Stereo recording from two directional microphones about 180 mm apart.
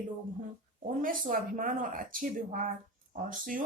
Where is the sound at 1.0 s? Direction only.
50° right (ahead or behind).